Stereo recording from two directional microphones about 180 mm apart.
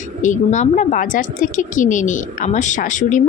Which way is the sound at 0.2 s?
45° left (ahead or behind).